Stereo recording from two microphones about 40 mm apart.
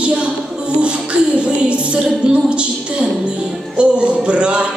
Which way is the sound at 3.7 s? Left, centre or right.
Right.